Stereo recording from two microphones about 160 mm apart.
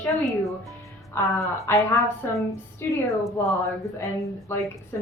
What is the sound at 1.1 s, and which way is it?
A woman's voice, 20° left (ahead or behind).